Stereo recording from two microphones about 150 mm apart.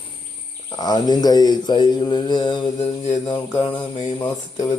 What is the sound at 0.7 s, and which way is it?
Speech, 25° left (ahead or behind).